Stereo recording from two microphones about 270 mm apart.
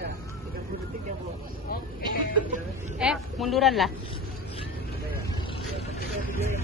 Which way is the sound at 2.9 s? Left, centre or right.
Centre.